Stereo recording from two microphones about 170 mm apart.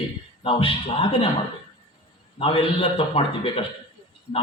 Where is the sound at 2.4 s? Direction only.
35° left (ahead or behind).